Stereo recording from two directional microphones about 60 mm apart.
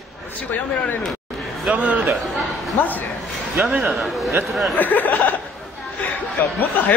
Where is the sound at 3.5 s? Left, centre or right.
Centre.